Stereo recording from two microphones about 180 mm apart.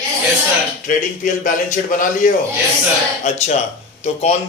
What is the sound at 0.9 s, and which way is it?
A man's voice, 45° left (ahead or behind).